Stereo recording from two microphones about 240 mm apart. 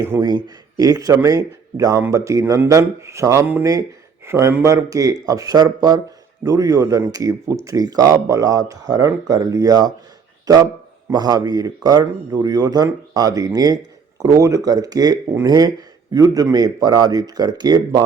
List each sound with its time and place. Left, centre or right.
0.0 s speech: centre